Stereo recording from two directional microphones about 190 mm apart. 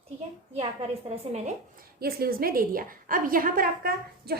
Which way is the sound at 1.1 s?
35° right (ahead or behind).